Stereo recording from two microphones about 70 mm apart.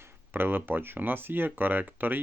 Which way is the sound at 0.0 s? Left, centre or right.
Right.